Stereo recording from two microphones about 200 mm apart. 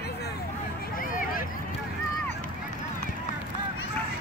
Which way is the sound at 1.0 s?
45° left (ahead or behind).